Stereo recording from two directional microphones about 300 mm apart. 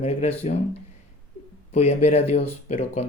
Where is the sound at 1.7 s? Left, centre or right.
Left.